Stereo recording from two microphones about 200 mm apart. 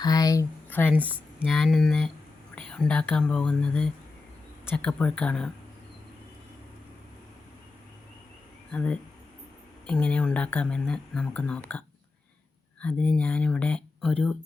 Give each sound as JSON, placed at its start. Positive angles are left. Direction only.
{"t": 0.0, "sound": "speech", "side_deg": 20}
{"t": 0.9, "sound": "speech", "side_deg": -10}
{"t": 8.7, "sound": "speech", "side_deg": 5}
{"t": 12.8, "sound": "speech", "side_deg": 5}